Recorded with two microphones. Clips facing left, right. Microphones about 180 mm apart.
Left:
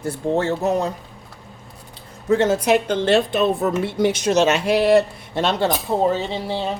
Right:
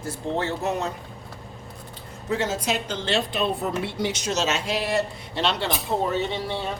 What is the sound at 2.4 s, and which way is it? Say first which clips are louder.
A woman's voice: left 9 dB; 60° left (ahead or behind).